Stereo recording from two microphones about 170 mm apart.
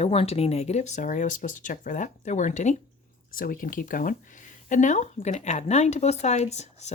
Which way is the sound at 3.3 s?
55° left (ahead or behind).